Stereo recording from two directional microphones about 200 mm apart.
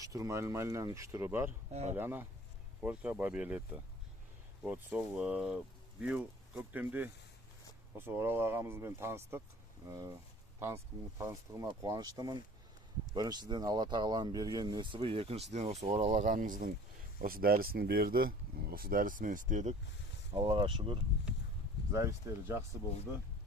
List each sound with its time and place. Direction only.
0.0 s speech: 15° right (ahead or behind)
1.7 s speech: 35° right (ahead or behind)
2.0 s speech: 10° right (ahead or behind)
4.6 s speech: 10° right (ahead or behind)
11.2 s speech: 15° right (ahead or behind); by 19.7 s 40° right (ahead or behind)
20.3 s speech: 25° right (ahead or behind)
21.9 s speech: 15° right (ahead or behind)